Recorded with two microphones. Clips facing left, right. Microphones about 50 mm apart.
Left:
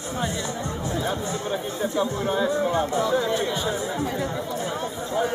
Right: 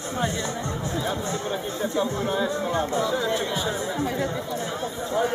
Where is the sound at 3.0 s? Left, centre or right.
Centre.